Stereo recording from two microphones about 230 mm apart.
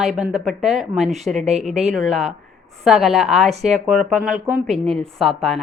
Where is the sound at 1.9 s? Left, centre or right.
Centre.